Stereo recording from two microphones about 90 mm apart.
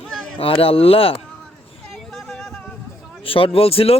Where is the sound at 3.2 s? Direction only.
90° left.